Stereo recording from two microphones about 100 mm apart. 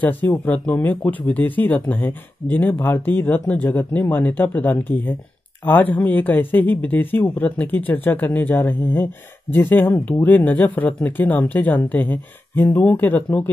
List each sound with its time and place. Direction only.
0.0 s speech: 20° left (ahead or behind)